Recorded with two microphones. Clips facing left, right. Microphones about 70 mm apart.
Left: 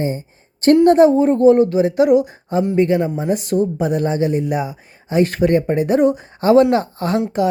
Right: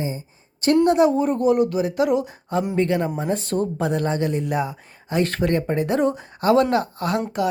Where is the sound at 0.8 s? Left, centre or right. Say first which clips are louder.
Left 6 dB; left; by 3.0 s centre.